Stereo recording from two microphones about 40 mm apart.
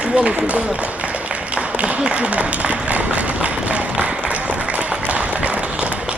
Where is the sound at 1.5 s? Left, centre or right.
Right.